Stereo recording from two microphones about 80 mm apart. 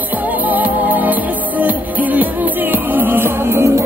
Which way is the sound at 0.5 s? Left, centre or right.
Right.